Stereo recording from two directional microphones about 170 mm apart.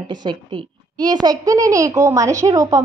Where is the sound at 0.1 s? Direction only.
25° right (ahead or behind).